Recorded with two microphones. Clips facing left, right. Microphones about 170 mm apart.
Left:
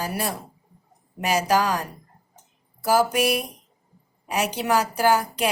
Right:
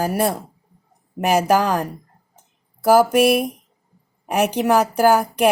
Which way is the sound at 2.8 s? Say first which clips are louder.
Right 7 dB; 55° right (ahead or behind).